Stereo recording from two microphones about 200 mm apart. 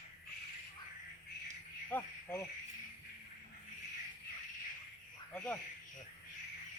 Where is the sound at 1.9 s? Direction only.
10° left (ahead or behind).